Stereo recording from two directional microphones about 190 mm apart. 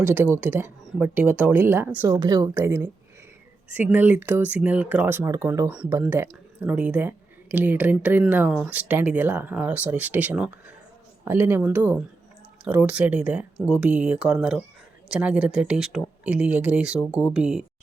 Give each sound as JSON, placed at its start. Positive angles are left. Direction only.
{"t": 0.0, "sound": "speech", "side_deg": -10}